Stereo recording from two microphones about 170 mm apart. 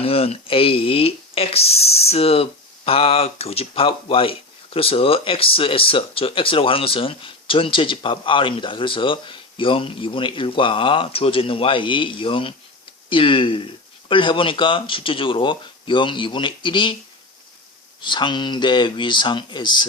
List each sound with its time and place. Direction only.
0.0 s speech: 35° left (ahead or behind)
18.0 s speech: 25° left (ahead or behind)